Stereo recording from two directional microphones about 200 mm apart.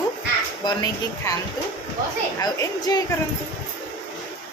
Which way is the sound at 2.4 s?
20° left (ahead or behind).